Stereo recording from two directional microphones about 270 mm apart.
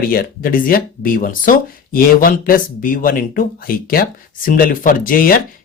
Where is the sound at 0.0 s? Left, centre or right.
Left.